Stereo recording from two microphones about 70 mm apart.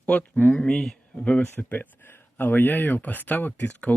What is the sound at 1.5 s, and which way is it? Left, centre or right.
Speech, left.